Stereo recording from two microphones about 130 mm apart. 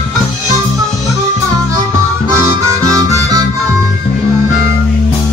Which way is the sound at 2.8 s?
25° right (ahead or behind).